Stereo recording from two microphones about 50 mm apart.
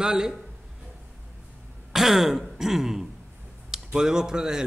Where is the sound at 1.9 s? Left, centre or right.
Centre.